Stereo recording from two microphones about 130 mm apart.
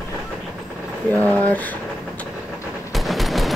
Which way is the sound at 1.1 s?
15° left (ahead or behind).